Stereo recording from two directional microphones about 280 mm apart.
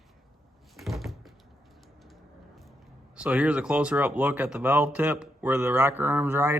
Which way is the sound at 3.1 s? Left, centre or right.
Centre.